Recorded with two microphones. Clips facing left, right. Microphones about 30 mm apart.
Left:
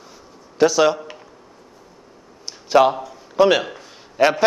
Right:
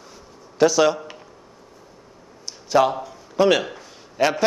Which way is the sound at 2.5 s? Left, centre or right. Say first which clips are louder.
Left 3 dB; centre.